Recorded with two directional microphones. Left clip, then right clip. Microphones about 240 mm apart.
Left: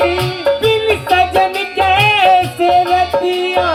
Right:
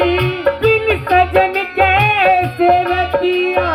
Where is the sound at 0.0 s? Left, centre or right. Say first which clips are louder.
Even; left.